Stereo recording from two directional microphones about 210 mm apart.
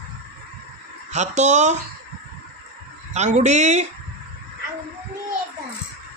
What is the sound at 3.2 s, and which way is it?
Speech, 35° right (ahead or behind).